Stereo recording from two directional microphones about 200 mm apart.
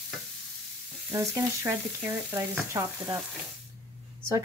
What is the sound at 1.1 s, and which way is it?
Speech, 10° right (ahead or behind).